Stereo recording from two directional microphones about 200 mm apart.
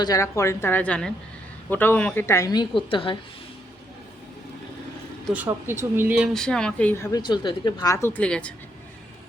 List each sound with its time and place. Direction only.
0.0 s a woman's voice: 15° left (ahead or behind)
5.5 s speech: 10° right (ahead or behind); by 7.1 s 5° left (ahead or behind)
7.1 s a woman's voice: 25° left (ahead or behind); by 8.5 s 5° left (ahead or behind)